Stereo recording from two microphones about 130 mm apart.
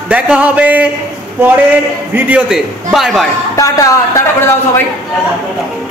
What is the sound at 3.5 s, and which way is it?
Speech, 25° left (ahead or behind).